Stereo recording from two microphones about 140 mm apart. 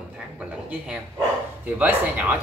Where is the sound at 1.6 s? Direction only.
10° right (ahead or behind).